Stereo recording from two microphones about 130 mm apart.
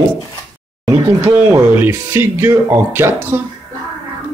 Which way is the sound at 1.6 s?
15° right (ahead or behind).